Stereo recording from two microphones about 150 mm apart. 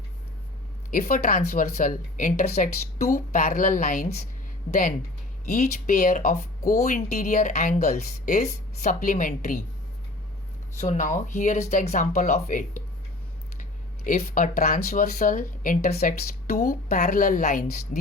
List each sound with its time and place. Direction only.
0.9 s speech: 65° left (ahead or behind)
5.5 s speech: 50° left (ahead or behind)
10.8 s speech: 55° left (ahead or behind)
13.6 s a sound: 60° left (ahead or behind)
14.3 s speech: 65° left (ahead or behind); by 16.6 s 80° left
16.6 s speech: 55° left (ahead or behind)